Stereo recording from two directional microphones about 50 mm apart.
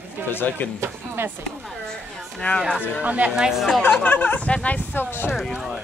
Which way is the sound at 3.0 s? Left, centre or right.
Right.